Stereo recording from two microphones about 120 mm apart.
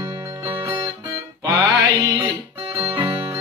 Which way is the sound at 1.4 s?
25° right (ahead or behind).